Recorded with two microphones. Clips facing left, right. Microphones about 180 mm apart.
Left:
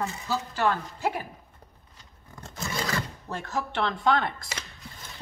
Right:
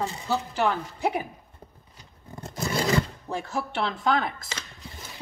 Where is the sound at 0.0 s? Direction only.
30° right (ahead or behind).